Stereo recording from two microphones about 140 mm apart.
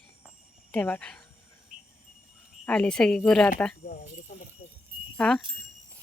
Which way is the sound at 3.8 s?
90° left.